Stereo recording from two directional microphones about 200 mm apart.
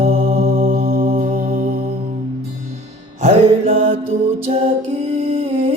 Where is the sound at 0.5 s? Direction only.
30° right (ahead or behind).